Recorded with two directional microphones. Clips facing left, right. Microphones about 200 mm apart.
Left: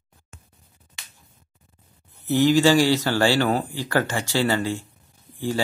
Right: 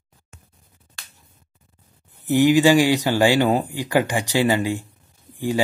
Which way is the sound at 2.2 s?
15° right (ahead or behind).